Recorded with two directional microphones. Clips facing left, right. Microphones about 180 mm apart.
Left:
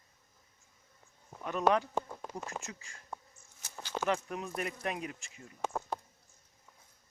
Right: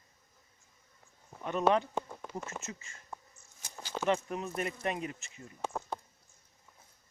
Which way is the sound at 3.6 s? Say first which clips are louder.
Even; 10° right (ahead or behind).